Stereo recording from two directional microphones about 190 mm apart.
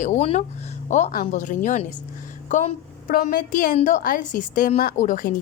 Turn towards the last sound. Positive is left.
turn(degrees=45)  # may be behind; listen again after turning